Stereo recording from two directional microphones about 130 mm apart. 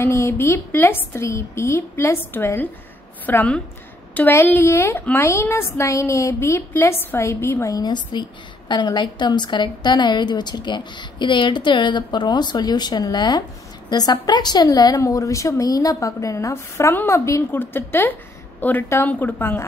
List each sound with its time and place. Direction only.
0.0 s a woman's voice: 20° left (ahead or behind)